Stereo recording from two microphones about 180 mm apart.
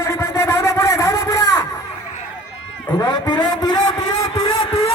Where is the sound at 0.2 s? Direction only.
15° left (ahead or behind).